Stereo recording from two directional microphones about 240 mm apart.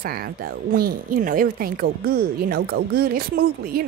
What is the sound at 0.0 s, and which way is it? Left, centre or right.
Speech, right.